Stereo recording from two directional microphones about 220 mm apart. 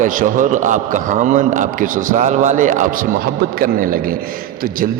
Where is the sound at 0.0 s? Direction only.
35° right (ahead or behind).